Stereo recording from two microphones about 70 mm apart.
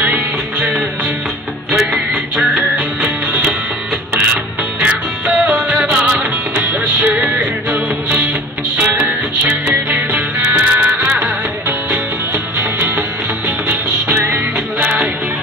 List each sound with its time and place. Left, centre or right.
2.3 s music: centre
4.7 s music: centre
8.7 s music: right
10.4 s music: right